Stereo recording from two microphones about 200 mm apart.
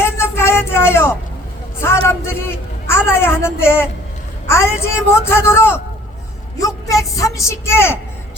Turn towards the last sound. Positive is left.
turn(degrees=10)  # may be behind; listen again after turning